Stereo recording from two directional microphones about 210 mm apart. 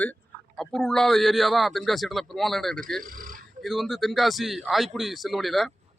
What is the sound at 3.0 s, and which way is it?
Speech, 40° right (ahead or behind).